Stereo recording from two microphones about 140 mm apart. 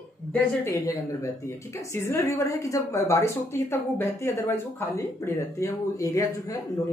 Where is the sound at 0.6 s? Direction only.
20° left (ahead or behind).